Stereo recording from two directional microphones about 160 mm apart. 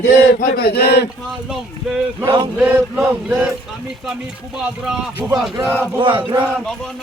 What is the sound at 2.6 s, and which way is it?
Chant, 10° right (ahead or behind).